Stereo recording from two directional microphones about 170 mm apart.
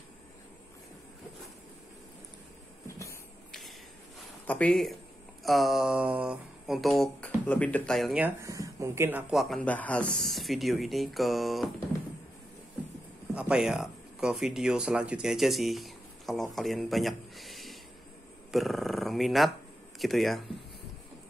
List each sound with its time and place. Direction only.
2.9 s a sound: 15° left (ahead or behind)
4.5 s speech: 5° left (ahead or behind)
8.4 s speech: 20° right (ahead or behind)
9.3 s speech: centre (ahead or behind)
13.3 s speech: 5° right (ahead or behind)